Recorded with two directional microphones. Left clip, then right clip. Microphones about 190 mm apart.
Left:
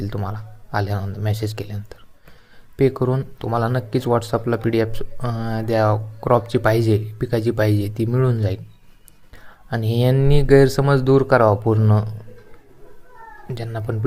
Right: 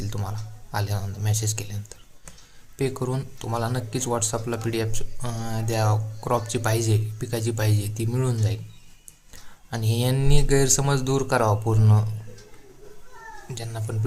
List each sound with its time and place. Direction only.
0.0 s speech: 25° left (ahead or behind)
13.5 s speech: 30° left (ahead or behind)